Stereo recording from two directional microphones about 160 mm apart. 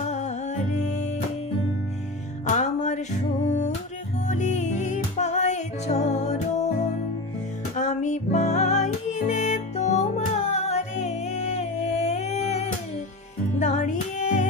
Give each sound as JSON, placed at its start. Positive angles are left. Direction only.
{"t": 0.0, "sound": "music", "side_deg": 45}
{"t": 2.4, "sound": "music", "side_deg": 50}